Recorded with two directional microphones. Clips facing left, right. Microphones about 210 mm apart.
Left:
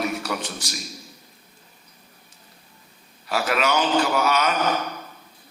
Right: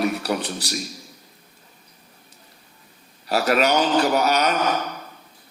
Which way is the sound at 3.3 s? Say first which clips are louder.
Right 4 dB; 40° right (ahead or behind).